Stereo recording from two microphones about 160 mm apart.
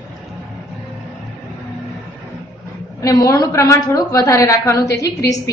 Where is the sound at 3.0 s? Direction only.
20° left (ahead or behind).